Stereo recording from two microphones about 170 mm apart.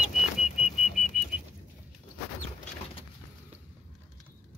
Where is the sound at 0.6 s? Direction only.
Centre (ahead or behind).